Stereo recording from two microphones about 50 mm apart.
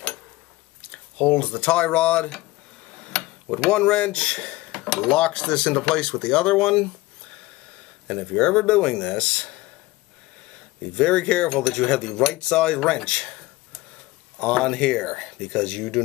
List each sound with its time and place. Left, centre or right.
0.9 s speech: left
3.1 s mechanisms: centre
3.7 s speech: left
4.7 s dishes: centre
5.0 s speech: centre
8.1 s speech: centre
10.8 s speech: centre
11.5 s speech: centre
11.9 s speech: centre